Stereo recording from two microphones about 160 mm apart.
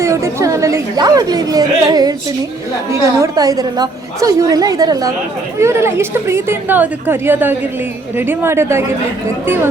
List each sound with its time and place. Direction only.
0.0 s a woman's voice: 20° right (ahead or behind)